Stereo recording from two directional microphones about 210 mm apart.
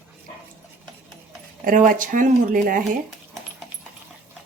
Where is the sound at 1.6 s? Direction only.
40° right (ahead or behind).